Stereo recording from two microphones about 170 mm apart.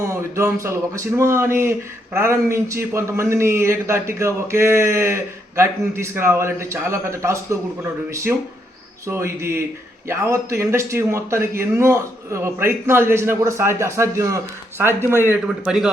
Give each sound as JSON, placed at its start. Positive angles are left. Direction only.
{"t": 0.0, "sound": "a man's voice", "side_deg": -15}